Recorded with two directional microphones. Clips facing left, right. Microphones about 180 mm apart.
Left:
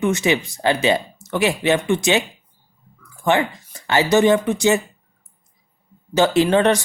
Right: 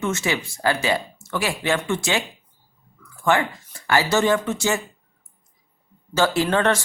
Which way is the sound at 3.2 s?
20° left (ahead or behind).